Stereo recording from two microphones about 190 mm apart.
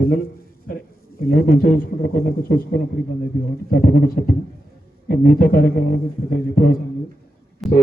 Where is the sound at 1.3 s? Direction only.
50° left (ahead or behind).